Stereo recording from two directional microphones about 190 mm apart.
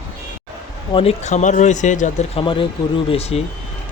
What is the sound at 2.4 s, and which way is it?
Speech, 25° left (ahead or behind).